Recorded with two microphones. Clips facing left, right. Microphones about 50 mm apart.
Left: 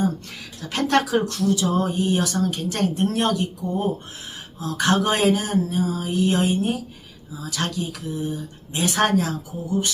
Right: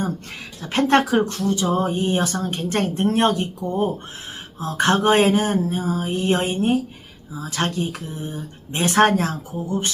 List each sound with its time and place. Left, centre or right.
0.6 s speech: right